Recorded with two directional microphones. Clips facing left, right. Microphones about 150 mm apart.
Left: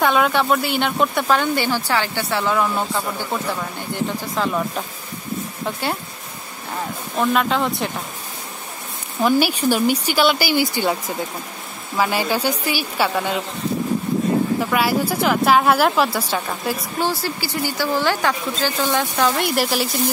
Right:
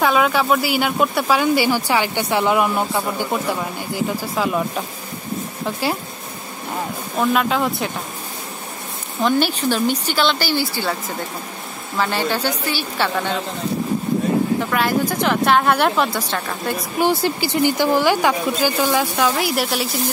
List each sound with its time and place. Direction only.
0.0 s a woman's voice: centre (ahead or behind)
7.2 s a woman's voice: centre (ahead or behind)
9.2 s speech: 10° left (ahead or behind)
14.7 s a woman's voice: 5° left (ahead or behind)
17.0 s speech: 20° right (ahead or behind); by 19.9 s centre (ahead or behind)